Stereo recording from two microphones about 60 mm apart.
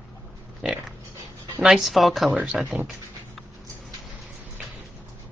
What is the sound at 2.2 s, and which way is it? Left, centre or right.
Speech, right.